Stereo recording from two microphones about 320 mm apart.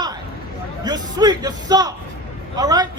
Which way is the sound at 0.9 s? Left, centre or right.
Centre.